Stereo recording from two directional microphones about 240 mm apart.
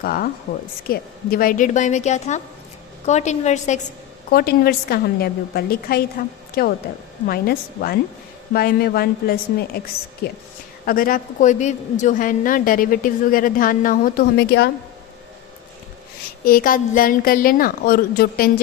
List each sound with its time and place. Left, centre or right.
0.0 s a woman's voice: left
4.3 s a woman's voice: left
10.8 s a woman's voice: left
16.4 s a woman's voice: left